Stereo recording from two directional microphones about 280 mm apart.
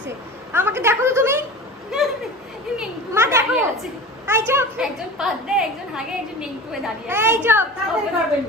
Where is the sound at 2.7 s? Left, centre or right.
Centre.